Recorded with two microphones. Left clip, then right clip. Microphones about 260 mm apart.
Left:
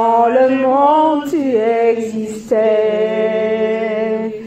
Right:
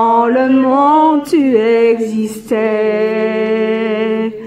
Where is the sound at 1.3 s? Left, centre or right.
Right.